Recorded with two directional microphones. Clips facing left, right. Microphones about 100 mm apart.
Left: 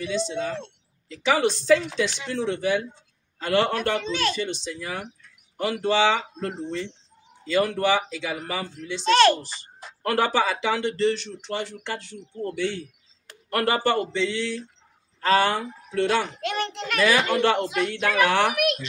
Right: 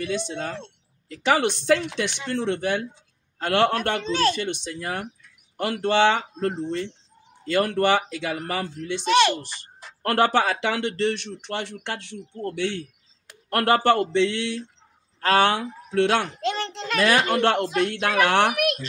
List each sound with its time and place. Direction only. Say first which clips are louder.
0.0 s speech: left 1 dB; 55° right (ahead or behind)
4.0 s speech: right 4 dB; 35° right (ahead or behind)
4.4 s speech: right 1 dB; 60° right (ahead or behind)
9.0 s speech: left 2 dB; 15° right (ahead or behind)
10.0 s a man's voice: right 2 dB; 60° right (ahead or behind)
16.3 s a child's voice: right 1 dB; 30° right (ahead or behind)
17.0 s speech: right 1 dB; 60° right (ahead or behind)
18.6 s speech: even; 40° right (ahead or behind)